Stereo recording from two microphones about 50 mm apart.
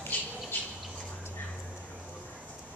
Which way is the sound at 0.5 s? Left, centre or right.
Left.